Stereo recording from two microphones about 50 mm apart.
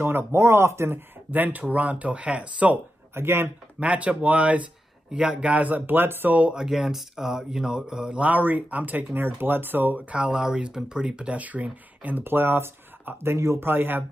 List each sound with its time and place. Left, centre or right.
0.0 s speech: right
1.3 s speech: right
3.2 s speech: right
3.8 s speech: right
6.5 s speech: centre
8.2 s speech: right
9.9 s speech: right
10.3 s speech: centre; by 12.2 s right
12.2 s speech: right
13.6 s speech: right